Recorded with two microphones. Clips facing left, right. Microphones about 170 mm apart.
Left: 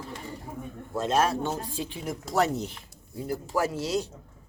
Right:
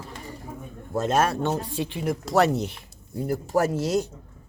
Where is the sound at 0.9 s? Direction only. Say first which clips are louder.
Right 2 dB; 50° right (ahead or behind); by 2.7 s 70° right (ahead or behind).